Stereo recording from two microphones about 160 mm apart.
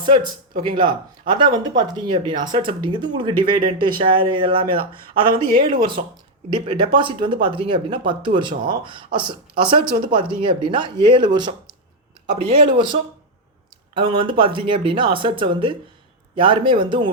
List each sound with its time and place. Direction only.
0.7 s speech: 30° right (ahead or behind)